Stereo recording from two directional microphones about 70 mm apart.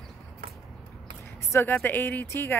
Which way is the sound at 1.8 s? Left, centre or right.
Left.